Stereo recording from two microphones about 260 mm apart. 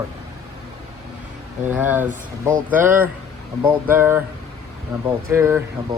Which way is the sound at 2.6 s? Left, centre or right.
Centre.